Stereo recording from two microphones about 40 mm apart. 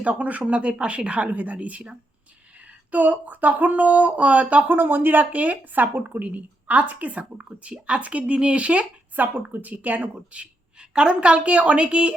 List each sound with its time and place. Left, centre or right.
0.0 s a woman's voice: right
4.7 s speech: right
5.2 s a woman's voice: right
9.1 s speech: right
10.3 s a woman's voice: right